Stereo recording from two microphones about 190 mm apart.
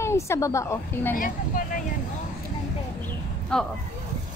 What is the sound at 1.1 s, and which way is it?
Speech, 45° left (ahead or behind).